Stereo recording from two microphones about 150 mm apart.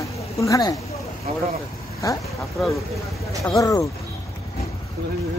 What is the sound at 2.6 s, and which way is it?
Speech, centre (ahead or behind).